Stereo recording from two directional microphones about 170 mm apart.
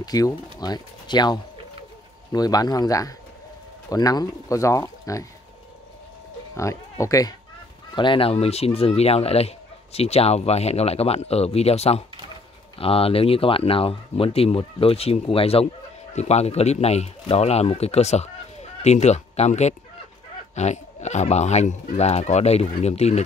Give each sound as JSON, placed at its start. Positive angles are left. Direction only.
{"t": 0.0, "sound": "speech", "side_deg": 20}
{"t": 6.5, "sound": "speech", "side_deg": 20}